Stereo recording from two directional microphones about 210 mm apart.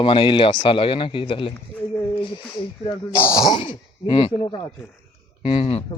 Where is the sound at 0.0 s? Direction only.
25° left (ahead or behind).